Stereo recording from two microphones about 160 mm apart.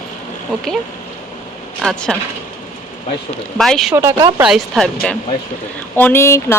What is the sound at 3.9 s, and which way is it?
Speech, 15° right (ahead or behind).